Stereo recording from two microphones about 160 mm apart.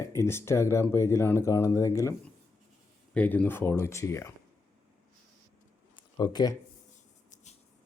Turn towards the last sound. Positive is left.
turn(degrees=25)  # may be behind; listen again after turning